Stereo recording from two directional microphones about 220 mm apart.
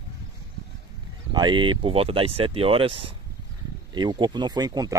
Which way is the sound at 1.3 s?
20° right (ahead or behind).